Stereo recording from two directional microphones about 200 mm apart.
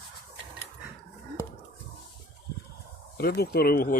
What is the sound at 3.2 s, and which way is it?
Speech, 55° left (ahead or behind).